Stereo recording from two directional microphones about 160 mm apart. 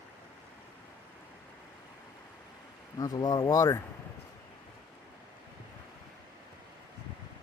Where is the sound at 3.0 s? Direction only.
25° left (ahead or behind).